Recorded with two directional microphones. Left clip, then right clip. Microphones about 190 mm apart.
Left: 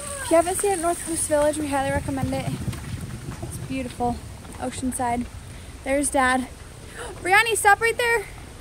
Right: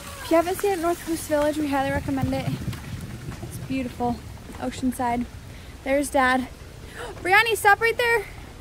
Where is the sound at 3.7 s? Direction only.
10° left (ahead or behind).